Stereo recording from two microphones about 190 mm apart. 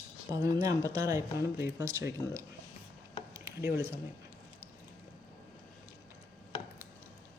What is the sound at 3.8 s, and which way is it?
Speech, 15° right (ahead or behind).